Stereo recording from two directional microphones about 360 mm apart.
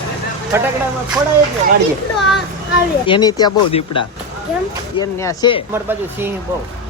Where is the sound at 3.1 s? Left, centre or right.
Centre.